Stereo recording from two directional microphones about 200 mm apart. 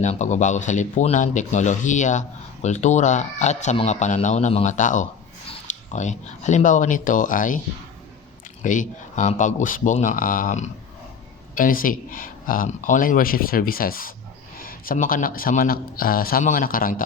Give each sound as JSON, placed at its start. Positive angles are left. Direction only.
{"t": 0.0, "sound": "speech", "side_deg": 35}
{"t": 8.6, "sound": "speech", "side_deg": 40}